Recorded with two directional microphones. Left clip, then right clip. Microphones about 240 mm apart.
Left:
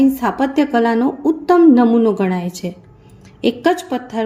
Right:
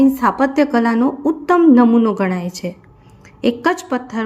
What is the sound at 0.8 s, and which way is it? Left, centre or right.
Speech, centre.